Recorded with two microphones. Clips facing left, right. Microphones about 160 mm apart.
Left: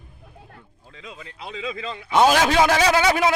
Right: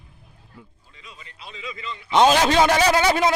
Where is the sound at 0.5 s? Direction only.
80° left.